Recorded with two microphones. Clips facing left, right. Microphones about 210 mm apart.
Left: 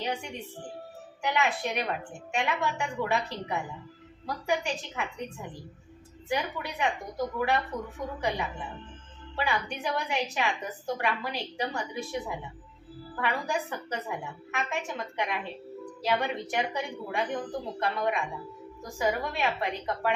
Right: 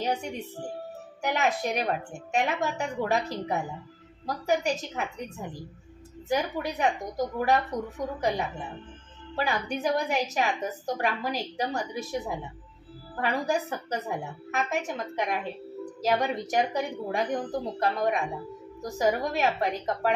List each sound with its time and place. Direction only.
0.0 s music: 40° right (ahead or behind)
1.2 s a woman's voice: 40° right (ahead or behind)
6.2 s a woman's voice: 40° right (ahead or behind)
9.3 s a woman's voice: 40° right (ahead or behind)